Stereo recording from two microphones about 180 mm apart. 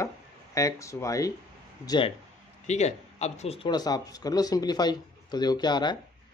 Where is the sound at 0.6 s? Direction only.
15° left (ahead or behind).